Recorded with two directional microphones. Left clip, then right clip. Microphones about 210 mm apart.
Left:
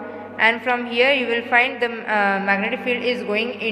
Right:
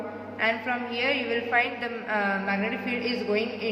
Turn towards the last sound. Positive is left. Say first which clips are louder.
# left 5 dB
turn(degrees=45)  # may be behind; listen again after turning